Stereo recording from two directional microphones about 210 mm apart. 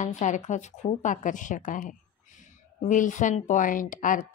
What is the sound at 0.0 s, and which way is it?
A woman's voice, 35° left (ahead or behind).